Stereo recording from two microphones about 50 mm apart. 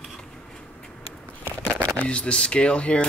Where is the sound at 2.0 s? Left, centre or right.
Left.